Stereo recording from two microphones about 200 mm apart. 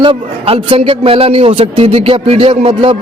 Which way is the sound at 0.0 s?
25° right (ahead or behind).